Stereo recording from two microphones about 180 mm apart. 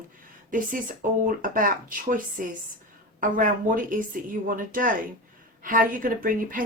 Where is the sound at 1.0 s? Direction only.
45° right (ahead or behind).